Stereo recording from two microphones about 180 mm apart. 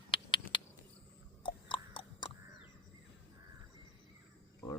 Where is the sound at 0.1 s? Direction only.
25° left (ahead or behind).